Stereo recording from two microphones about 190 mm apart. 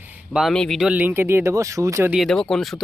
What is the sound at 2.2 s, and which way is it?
Speech, centre (ahead or behind).